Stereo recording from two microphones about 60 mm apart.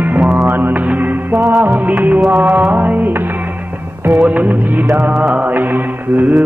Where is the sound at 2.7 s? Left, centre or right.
Right.